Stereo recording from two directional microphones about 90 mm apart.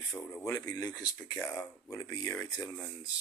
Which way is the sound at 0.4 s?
40° left (ahead or behind).